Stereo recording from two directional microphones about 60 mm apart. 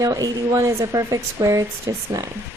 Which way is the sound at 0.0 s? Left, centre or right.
Right.